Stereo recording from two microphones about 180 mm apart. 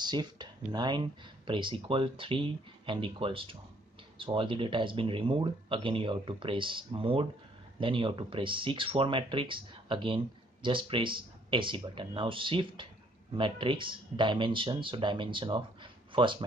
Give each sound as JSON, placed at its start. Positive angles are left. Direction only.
{"t": 0.0, "sound": "speech", "side_deg": -25}